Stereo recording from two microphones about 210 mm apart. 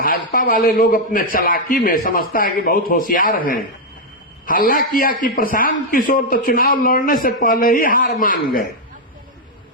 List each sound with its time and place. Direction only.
0.0 s a man's voice: 45° left (ahead or behind)